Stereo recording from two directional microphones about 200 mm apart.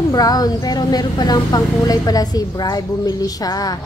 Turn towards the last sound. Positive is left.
turn(degrees=20)  # may be behind; listen again after turning